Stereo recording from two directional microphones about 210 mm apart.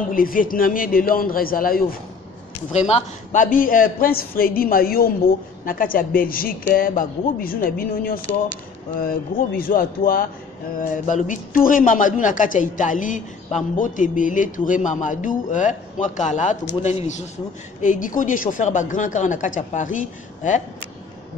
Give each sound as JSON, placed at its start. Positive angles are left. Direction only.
{"t": 0.1, "sound": "a man's voice", "side_deg": 40}
{"t": 2.7, "sound": "a man's voice", "side_deg": 35}